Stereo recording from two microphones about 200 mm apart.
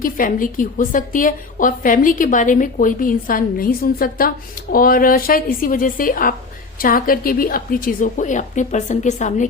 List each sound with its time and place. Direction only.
0.0 s a woman's voice: 45° left (ahead or behind)